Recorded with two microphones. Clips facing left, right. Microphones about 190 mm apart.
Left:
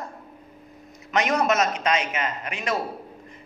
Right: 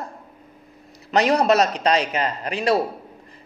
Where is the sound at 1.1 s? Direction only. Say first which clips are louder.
Right 5 dB; 35° right (ahead or behind).